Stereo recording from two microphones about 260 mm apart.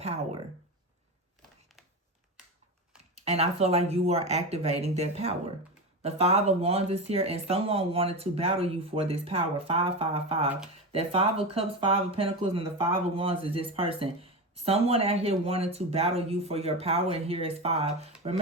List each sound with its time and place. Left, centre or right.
0.0 s speech: right
3.2 s speech: right